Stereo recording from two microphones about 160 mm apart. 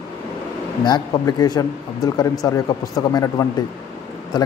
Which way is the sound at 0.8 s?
25° left (ahead or behind).